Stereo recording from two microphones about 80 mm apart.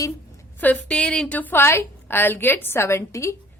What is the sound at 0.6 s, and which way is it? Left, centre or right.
Speech, left.